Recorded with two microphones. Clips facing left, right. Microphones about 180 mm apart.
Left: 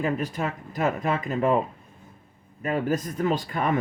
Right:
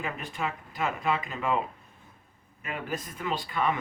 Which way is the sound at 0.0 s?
40° left (ahead or behind).